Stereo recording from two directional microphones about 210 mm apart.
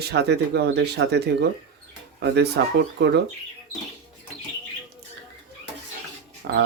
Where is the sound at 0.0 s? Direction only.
50° right (ahead or behind).